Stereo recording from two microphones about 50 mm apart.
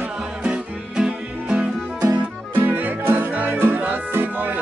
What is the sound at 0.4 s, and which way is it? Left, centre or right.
Music, centre.